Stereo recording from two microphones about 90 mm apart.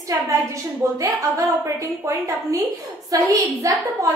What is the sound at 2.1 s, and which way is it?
A woman's voice, 35° right (ahead or behind).